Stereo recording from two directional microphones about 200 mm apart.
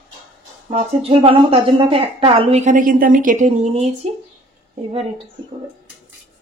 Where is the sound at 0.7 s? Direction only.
30° right (ahead or behind).